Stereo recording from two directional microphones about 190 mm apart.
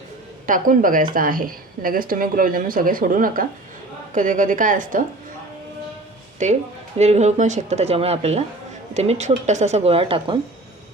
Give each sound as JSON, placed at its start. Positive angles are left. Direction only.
{"t": 0.4, "sound": "speech", "side_deg": -45}
{"t": 6.4, "sound": "speech", "side_deg": -40}